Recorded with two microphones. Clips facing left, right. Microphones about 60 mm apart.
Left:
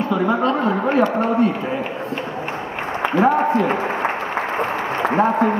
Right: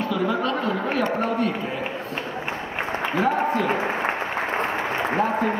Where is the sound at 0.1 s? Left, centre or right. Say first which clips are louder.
Left 6 dB; left.